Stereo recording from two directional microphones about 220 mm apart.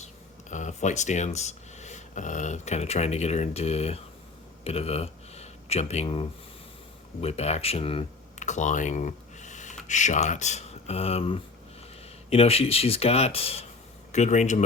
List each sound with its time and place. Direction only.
0.5 s speech: 35° left (ahead or behind)